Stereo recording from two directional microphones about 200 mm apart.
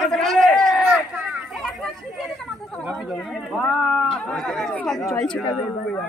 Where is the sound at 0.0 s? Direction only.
Centre (ahead or behind).